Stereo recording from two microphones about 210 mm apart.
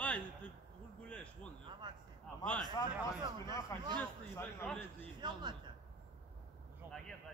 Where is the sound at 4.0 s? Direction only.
5° left (ahead or behind).